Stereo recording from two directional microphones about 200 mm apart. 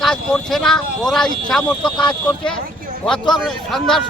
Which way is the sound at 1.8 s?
25° left (ahead or behind).